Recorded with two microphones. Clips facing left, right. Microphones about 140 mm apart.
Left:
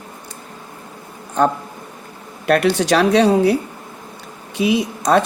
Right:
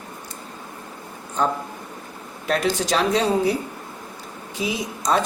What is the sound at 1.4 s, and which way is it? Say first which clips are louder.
Speech: left 6 dB; 60° left (ahead or behind).